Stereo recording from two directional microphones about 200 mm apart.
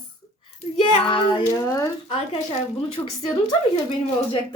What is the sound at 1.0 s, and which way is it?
Speech, 25° left (ahead or behind).